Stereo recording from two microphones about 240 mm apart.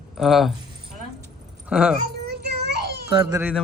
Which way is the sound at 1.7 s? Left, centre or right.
Centre.